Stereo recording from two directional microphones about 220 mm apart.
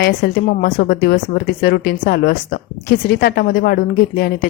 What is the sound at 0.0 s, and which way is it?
A woman's voice, 45° left (ahead or behind).